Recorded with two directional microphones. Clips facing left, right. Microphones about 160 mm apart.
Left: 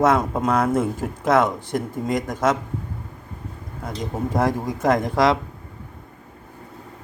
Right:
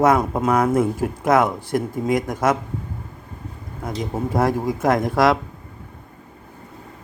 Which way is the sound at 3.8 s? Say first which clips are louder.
Right 2 dB; 10° right (ahead or behind).